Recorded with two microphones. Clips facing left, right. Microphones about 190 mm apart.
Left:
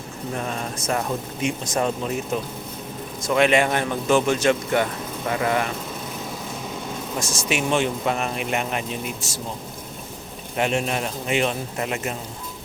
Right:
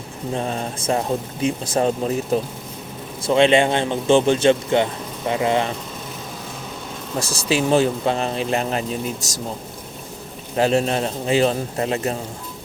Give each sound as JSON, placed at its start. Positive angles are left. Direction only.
{"t": 0.3, "sound": "a man's voice", "side_deg": -30}
{"t": 7.2, "sound": "speech", "side_deg": -35}
{"t": 10.6, "sound": "speech", "side_deg": -35}